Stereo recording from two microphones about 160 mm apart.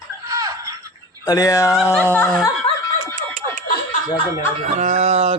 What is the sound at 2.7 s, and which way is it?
Snicker, 35° left (ahead or behind).